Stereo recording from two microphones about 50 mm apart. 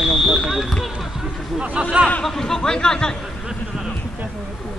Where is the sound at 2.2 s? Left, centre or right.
Centre.